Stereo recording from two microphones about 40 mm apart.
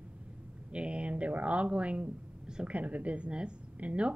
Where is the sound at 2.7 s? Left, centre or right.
Right.